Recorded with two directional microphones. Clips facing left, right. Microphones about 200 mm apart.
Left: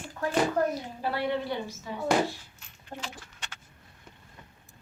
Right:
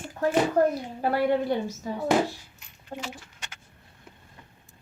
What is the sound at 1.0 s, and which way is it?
Speech, 50° right (ahead or behind).